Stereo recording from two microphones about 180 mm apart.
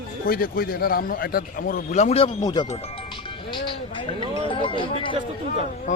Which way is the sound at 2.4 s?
25° left (ahead or behind).